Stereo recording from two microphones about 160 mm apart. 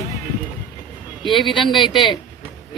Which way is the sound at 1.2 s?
30° left (ahead or behind).